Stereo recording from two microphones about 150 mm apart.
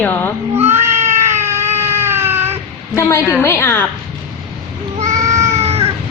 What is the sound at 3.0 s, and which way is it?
Speech, 20° left (ahead or behind).